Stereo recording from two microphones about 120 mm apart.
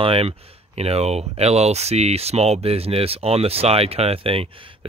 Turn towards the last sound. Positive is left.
turn(degrees=-50)  # may be behind; listen again after turning